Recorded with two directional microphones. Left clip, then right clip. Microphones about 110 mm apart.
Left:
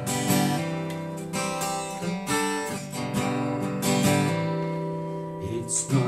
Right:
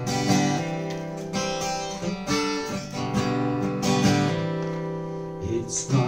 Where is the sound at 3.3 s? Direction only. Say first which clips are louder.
Right 2 dB; 20° left (ahead or behind).